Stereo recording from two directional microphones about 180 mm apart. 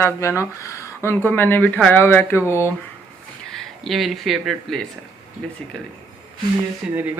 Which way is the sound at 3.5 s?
Centre (ahead or behind).